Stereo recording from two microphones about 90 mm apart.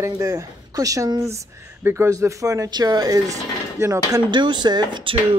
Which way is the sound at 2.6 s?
50° right (ahead or behind).